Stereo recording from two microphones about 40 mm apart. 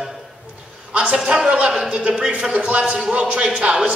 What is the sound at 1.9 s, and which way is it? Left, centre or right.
A man's voice, right.